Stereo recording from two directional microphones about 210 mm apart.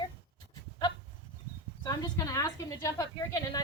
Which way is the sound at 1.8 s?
15° left (ahead or behind).